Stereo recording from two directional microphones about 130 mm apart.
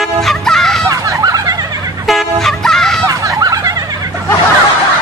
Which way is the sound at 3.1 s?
25° right (ahead or behind).